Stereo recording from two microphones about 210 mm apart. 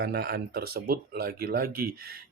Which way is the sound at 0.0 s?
50° right (ahead or behind).